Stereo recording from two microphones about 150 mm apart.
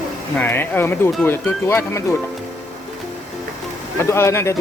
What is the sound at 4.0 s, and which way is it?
Speech, 20° left (ahead or behind).